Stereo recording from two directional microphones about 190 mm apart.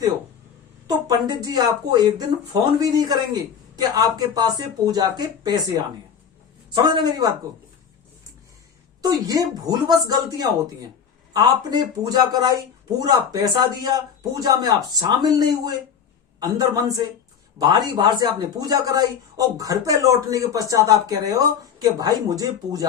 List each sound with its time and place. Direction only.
0.9 s speech: 20° right (ahead or behind)
9.0 s speech: 20° right (ahead or behind)